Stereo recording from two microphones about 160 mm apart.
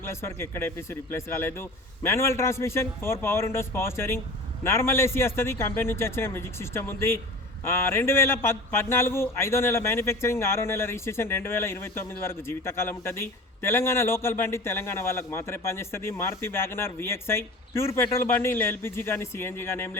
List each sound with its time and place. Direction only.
0.1 s a man's voice: 15° left (ahead or behind)